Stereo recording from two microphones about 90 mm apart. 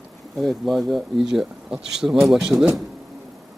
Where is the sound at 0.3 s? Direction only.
Centre (ahead or behind).